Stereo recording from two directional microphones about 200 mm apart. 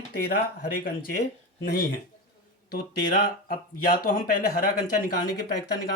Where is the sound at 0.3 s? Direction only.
50° left (ahead or behind).